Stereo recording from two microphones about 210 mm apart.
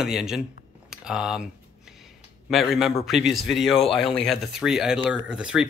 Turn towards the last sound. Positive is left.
turn(degrees=-5)  # may be behind; listen again after turning